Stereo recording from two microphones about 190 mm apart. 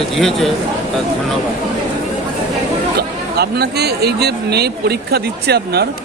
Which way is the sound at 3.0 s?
55° right (ahead or behind).